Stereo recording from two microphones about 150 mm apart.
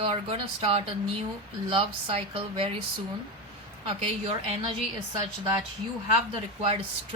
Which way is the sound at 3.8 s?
40° right (ahead or behind).